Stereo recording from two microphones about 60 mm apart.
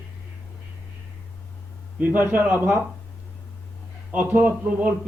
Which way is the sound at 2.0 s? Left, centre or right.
Right.